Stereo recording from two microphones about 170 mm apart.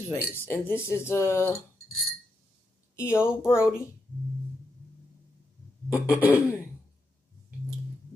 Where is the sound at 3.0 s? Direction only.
15° left (ahead or behind).